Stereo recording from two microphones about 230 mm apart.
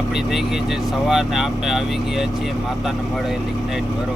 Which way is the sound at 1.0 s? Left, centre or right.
Centre.